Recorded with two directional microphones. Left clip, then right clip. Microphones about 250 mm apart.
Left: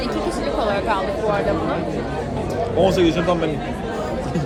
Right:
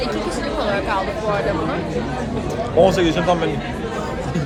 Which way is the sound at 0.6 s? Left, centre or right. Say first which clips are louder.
Even; centre.